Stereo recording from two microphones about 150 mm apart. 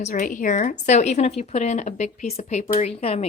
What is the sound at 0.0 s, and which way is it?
Speech, 60° left (ahead or behind).